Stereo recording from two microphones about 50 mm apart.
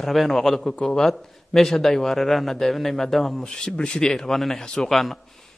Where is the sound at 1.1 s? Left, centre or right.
Centre.